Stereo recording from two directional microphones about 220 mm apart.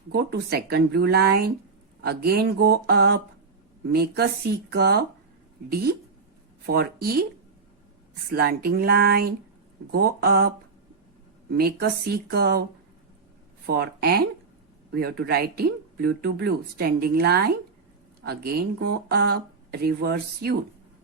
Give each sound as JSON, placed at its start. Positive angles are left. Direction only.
{"t": 0.1, "sound": "speech", "side_deg": -50}
{"t": 8.3, "sound": "speech", "side_deg": -45}
{"t": 11.5, "sound": "speech", "side_deg": -45}
{"t": 13.7, "sound": "speech", "side_deg": -45}